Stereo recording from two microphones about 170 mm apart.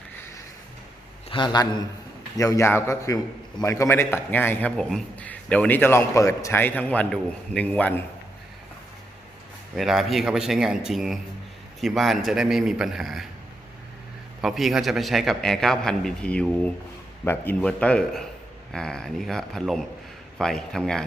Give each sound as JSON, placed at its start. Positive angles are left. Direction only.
{"t": 1.3, "sound": "a man's voice", "side_deg": 25}
{"t": 9.7, "sound": "a man's voice", "side_deg": 0}
{"t": 14.4, "sound": "a man's voice", "side_deg": 0}